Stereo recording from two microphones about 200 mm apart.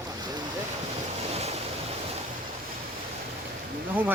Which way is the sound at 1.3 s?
30° right (ahead or behind).